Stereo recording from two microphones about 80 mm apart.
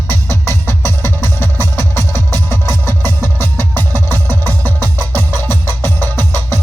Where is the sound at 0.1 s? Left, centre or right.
Left.